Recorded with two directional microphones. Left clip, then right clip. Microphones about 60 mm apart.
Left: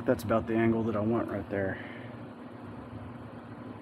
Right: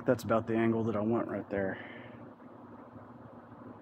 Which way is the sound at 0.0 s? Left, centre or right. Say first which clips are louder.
Left 1 dB; right.